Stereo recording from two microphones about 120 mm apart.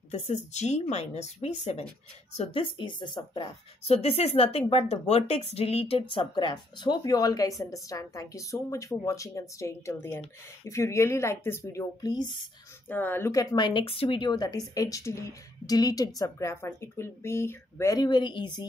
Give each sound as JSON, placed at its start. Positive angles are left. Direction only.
{"t": 0.1, "sound": "speech", "side_deg": 70}
{"t": 2.5, "sound": "speech", "side_deg": 45}
{"t": 3.8, "sound": "a woman's voice", "side_deg": 55}
{"t": 12.8, "sound": "a woman's voice", "side_deg": 15}
{"t": 13.8, "sound": "a woman's voice", "side_deg": 50}
{"t": 18.0, "sound": "speech", "side_deg": 40}